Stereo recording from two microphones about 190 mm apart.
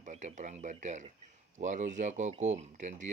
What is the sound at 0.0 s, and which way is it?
Speech, 40° right (ahead or behind).